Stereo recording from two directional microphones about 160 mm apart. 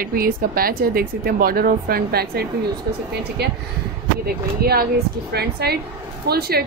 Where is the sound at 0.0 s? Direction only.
65° right (ahead or behind).